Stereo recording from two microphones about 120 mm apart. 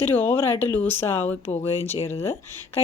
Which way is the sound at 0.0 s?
15° left (ahead or behind).